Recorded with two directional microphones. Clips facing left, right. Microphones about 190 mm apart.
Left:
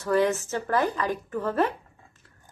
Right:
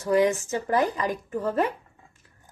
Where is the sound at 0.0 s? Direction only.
15° right (ahead or behind).